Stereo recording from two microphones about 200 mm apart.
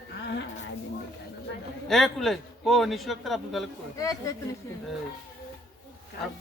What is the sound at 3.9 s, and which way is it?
Speech, 15° left (ahead or behind).